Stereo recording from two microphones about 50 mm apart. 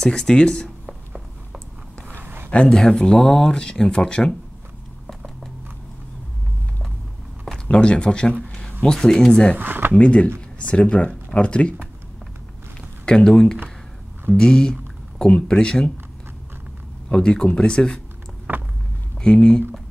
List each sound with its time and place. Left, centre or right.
0.0 s speech: centre
2.0 s a sound: right
2.7 s speech: centre
5.0 s a sound: centre
7.7 s speech: centre
8.5 s a sound: centre
8.8 s speech: centre
9.6 s speech: right
9.9 s speech: left
13.0 s speech: centre
17.1 s speech: centre
18.5 s a sound: right
19.2 s speech: centre